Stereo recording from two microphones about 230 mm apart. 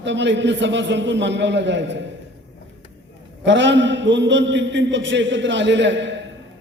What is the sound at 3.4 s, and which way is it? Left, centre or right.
A man's voice, right.